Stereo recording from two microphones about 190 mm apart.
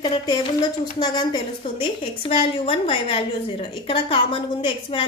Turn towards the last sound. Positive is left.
turn(degrees=25)  # may be behind; listen again after turning